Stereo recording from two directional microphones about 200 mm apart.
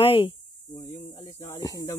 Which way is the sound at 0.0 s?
25° left (ahead or behind).